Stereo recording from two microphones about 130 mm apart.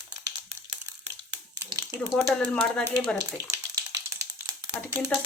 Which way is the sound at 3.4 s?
25° right (ahead or behind).